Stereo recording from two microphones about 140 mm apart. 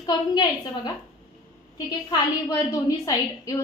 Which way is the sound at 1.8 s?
30° left (ahead or behind).